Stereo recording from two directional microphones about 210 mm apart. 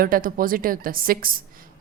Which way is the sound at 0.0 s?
40° right (ahead or behind).